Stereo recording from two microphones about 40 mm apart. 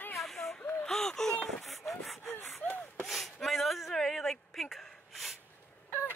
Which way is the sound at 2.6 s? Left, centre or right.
Left.